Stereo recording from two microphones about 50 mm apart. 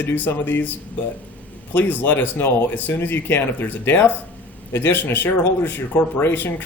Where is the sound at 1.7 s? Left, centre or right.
Left.